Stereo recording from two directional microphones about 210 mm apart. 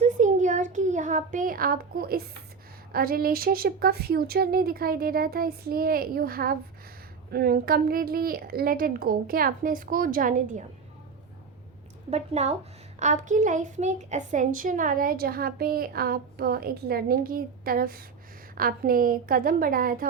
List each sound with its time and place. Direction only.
0.0 s a sound: 35° right (ahead or behind)
2.9 s a child's voice: 45° right (ahead or behind)
12.1 s a woman's voice: 30° right (ahead or behind)